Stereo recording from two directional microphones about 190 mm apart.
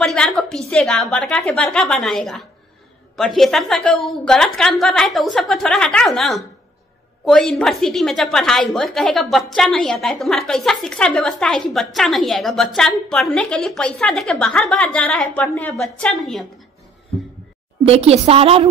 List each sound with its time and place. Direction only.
0.0 s a woman's voice: 5° left (ahead or behind)
17.8 s a woman's voice: 30° right (ahead or behind)